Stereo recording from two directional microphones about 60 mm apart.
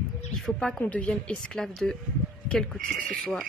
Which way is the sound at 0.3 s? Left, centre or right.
Centre.